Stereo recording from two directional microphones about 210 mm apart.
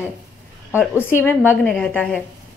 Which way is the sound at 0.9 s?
10° left (ahead or behind).